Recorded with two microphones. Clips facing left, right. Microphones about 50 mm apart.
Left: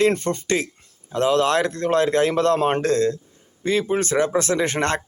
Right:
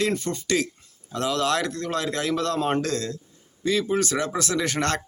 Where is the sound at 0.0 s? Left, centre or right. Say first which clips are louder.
Left 6 dB; left.